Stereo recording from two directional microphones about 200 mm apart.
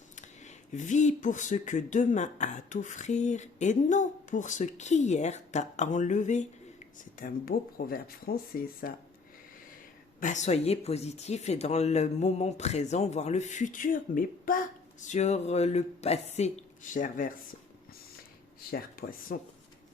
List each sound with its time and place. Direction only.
0.2 s speech: 35° left (ahead or behind)
10.2 s speech: 40° left (ahead or behind)
18.7 s speech: 45° left (ahead or behind)